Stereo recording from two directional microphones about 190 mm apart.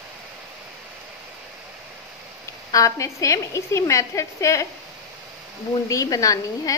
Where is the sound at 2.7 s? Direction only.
15° left (ahead or behind).